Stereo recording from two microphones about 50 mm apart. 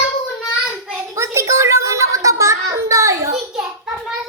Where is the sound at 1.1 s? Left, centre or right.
Right.